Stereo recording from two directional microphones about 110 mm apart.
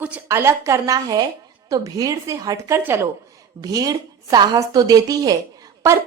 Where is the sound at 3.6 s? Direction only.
35° right (ahead or behind).